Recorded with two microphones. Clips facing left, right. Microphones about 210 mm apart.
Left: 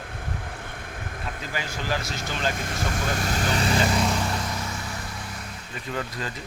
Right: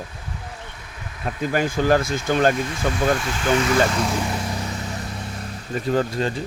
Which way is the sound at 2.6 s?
50° left (ahead or behind).